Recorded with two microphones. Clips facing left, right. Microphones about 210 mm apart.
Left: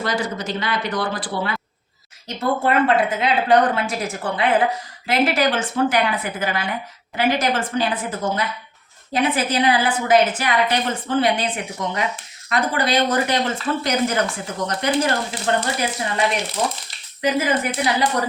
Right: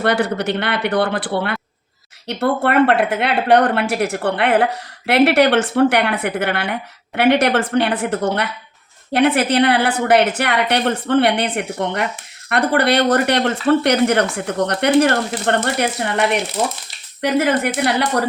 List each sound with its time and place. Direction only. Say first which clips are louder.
0.0 s a woman's voice: right 6 dB; 65° right (ahead or behind)